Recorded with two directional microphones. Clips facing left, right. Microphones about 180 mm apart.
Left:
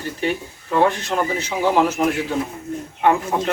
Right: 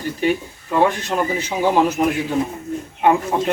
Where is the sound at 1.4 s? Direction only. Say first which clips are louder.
Right 1 dB; 15° right (ahead or behind).